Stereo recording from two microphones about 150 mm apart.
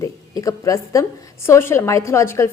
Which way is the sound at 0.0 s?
20° left (ahead or behind).